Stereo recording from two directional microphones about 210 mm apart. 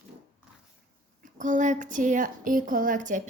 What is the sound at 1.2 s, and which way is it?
A woman's voice, 35° right (ahead or behind).